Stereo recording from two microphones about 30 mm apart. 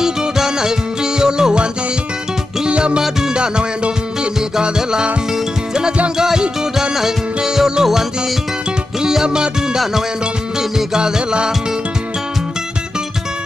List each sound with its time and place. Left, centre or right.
0.0 s music: right
3.3 s music: right
6.1 s music: right
9.0 s music: right
11.0 s music: right